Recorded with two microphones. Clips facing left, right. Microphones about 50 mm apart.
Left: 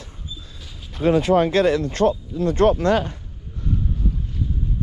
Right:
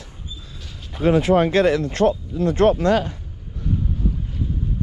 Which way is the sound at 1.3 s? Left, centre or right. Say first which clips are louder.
Right 1 dB; right.